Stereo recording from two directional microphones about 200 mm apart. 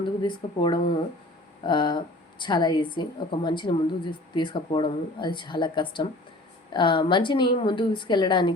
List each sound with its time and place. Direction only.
0.2 s a woman's voice: 20° left (ahead or behind)